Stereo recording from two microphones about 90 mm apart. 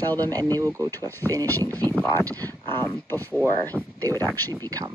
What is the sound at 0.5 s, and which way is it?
Speech, 40° right (ahead or behind).